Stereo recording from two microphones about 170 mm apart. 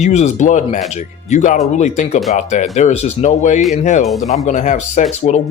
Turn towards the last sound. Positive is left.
turn(degrees=40)  # may be behind; listen again after turning